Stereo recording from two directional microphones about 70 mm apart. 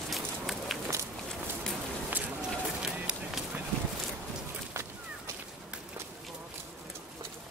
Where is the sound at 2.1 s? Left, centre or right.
Right.